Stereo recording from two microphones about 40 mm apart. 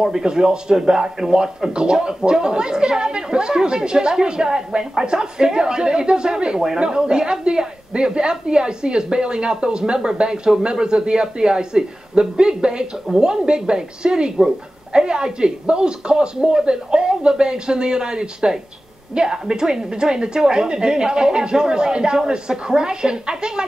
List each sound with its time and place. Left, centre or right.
0.0 s speech: centre